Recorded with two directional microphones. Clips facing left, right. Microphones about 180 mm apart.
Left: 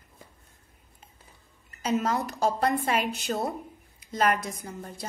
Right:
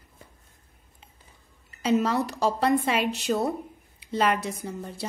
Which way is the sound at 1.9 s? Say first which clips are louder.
Right 4 dB; 30° right (ahead or behind).